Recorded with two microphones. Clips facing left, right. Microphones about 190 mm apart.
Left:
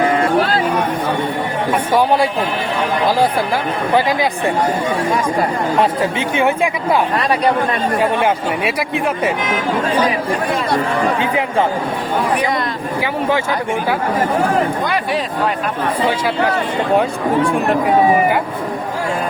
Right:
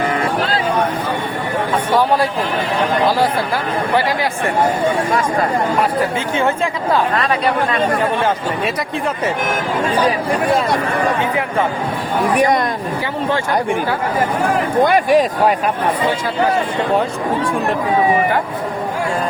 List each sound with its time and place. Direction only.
3.9 s speech: 15° left (ahead or behind)
5.8 s speech: 20° left (ahead or behind)
14.8 s speech: 50° right (ahead or behind)